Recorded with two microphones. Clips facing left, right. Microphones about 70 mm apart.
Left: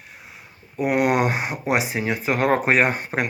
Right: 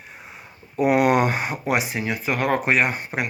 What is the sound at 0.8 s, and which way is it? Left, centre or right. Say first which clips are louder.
Speech: right 2 dB; centre.